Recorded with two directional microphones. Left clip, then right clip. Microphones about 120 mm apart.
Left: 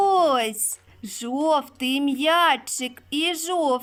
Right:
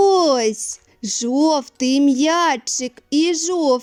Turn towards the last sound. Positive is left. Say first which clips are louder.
# right 5 dB
turn(degrees=-40)  # may be behind; listen again after turning